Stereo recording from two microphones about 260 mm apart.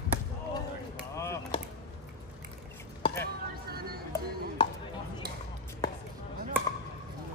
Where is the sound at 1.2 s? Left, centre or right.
Centre.